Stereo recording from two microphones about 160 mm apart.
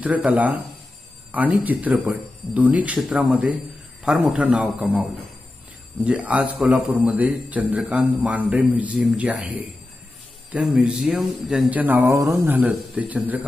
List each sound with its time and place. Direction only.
0.0 s speech: 10° right (ahead or behind)
6.0 s speech: 10° right (ahead or behind)